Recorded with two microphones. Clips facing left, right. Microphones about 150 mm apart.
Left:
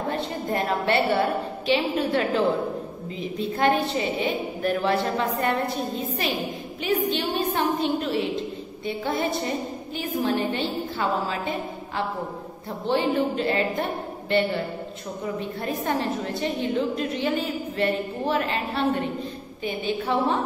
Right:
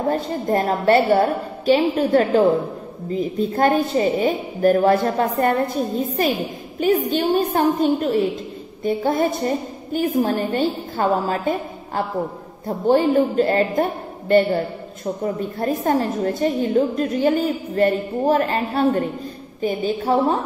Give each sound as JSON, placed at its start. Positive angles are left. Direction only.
{"t": 0.1, "sound": "a woman's voice", "side_deg": -40}